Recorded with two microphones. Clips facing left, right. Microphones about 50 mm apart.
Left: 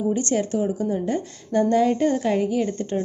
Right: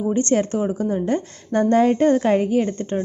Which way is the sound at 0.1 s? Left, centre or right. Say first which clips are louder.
Right 7 dB; right.